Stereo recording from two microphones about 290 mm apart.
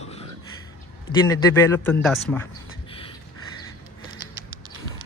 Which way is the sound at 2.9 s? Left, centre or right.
Centre.